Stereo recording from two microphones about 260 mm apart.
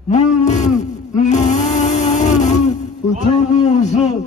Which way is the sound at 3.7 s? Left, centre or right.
Left.